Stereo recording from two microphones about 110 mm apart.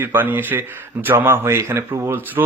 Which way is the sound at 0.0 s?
20° right (ahead or behind).